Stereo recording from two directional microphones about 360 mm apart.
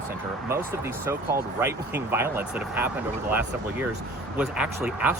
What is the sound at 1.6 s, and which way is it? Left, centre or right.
Speech, centre.